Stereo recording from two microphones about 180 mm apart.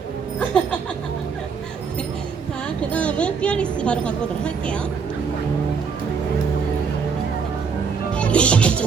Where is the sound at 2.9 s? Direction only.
5° left (ahead or behind).